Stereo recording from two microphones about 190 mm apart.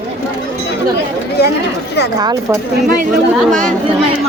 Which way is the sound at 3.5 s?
5° left (ahead or behind).